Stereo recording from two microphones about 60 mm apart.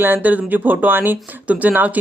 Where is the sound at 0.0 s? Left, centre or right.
Right.